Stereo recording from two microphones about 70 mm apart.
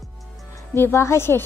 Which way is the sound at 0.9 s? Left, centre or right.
Left.